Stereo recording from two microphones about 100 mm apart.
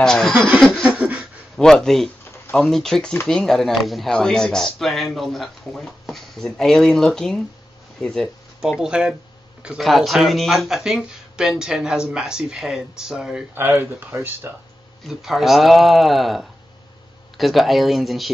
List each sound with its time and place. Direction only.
0.0 s speech: 5° left (ahead or behind)
0.8 s a sound: 10° right (ahead or behind)
1.6 s speech: 5° left (ahead or behind)
13.6 s speech: 20° right (ahead or behind)
15.0 s speech: centre (ahead or behind)